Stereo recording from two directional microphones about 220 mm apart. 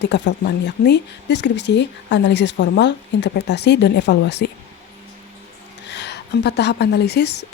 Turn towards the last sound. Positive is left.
turn(degrees=50)  # may be behind; listen again after turning